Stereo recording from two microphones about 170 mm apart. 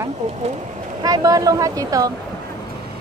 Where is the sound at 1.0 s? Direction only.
20° right (ahead or behind).